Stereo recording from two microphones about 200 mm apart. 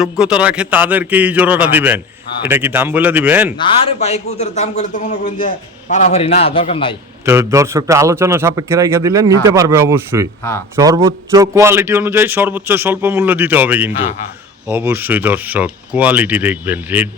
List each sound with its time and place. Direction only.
0.0 s a man's voice: 5° right (ahead or behind)
3.6 s a man's voice: 30° left (ahead or behind)
7.3 s a man's voice: 15° right (ahead or behind)